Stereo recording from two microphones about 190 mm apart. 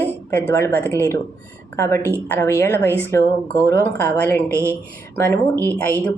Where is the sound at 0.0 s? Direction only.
10° left (ahead or behind).